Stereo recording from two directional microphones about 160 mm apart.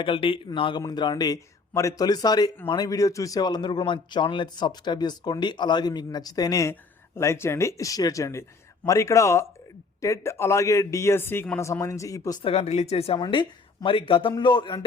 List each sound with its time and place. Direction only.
0.0 s a man's voice: 35° left (ahead or behind)
12.4 s speech: 40° left (ahead or behind)
13.1 s speech: 30° left (ahead or behind)